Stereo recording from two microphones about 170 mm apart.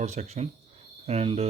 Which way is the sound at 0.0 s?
40° right (ahead or behind).